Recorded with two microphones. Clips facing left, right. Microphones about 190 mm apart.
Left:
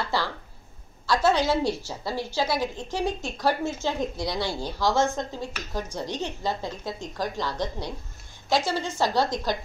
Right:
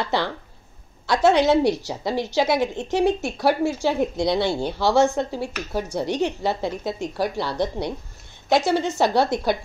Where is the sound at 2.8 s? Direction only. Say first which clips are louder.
Right 8 dB; 70° right (ahead or behind).